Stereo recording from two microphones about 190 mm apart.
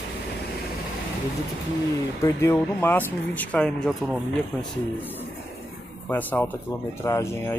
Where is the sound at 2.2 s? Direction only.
10° left (ahead or behind).